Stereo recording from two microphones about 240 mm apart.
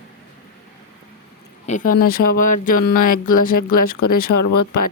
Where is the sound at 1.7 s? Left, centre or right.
Left.